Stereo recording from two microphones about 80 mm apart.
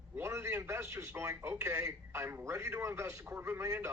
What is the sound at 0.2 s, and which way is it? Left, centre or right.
A man's voice, right.